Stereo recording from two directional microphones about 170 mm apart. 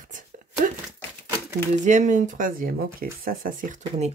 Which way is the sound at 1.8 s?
45° right (ahead or behind).